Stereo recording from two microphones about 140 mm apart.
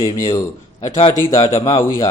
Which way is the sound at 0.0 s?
20° left (ahead or behind).